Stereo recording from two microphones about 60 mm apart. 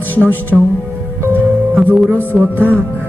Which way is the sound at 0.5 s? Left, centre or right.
Centre.